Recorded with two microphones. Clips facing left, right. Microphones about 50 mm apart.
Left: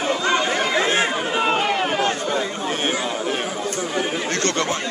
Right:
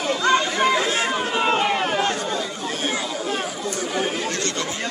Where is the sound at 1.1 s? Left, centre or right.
Centre.